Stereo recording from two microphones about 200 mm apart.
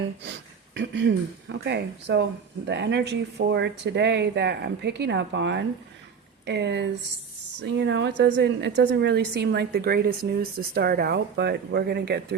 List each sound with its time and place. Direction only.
0.2 s a woman's voice: 60° right (ahead or behind)